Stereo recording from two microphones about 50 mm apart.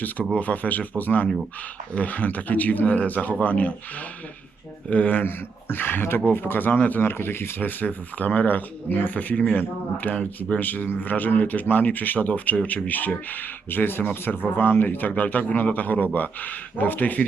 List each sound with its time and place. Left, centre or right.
0.3 s speech: left
4.9 s speech: left
5.2 s speech: left
7.0 s speech: left